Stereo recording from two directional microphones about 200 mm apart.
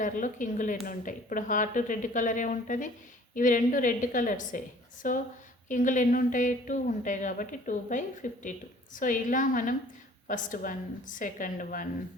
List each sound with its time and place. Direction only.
0.0 s a woman's voice: 40° left (ahead or behind)